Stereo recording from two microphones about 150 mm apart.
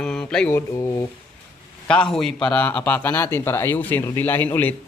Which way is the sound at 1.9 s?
5° left (ahead or behind).